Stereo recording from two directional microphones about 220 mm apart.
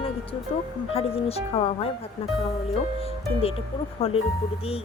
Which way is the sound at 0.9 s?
25° left (ahead or behind).